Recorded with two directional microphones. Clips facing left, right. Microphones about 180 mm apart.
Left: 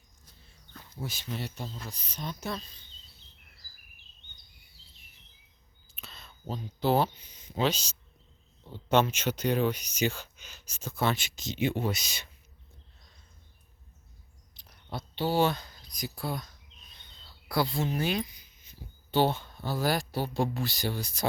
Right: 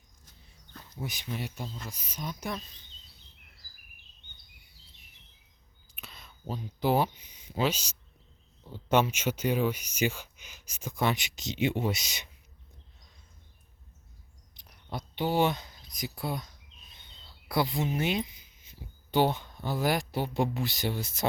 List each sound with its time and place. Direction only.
1.0 s speech: 15° right (ahead or behind)
5.9 s a sound: 10° right (ahead or behind)
6.8 s speech: 10° right (ahead or behind)
14.5 s speech: 20° right (ahead or behind)
17.5 s speech: 20° right (ahead or behind)